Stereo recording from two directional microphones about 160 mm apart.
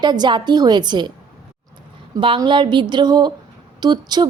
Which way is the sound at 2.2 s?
30° right (ahead or behind).